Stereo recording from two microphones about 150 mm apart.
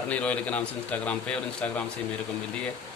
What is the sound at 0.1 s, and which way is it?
A man's voice, 10° left (ahead or behind).